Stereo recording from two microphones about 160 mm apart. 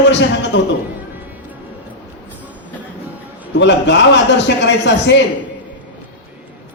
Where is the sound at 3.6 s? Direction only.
90° left.